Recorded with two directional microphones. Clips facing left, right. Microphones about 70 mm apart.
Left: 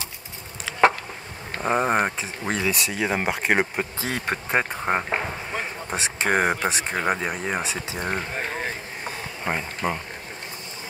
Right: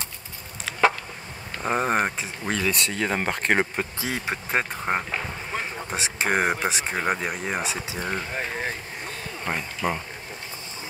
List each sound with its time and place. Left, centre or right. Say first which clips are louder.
0.7 s a sound: left 1 dB; centre
1.6 s speech: left 2 dB; centre
4.0 s speech: left 2 dB; centre
4.6 s speech: left 2 dB; centre
5.5 s a sound: left 1 dB; centre
6.1 s speech: left 1 dB; centre
8.0 s speech: left 2 dB; centre
8.4 s a sound: even; centre
9.4 s speech: left 2 dB; centre